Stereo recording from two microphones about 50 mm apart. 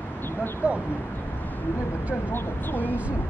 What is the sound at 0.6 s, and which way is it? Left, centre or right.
Speech, right.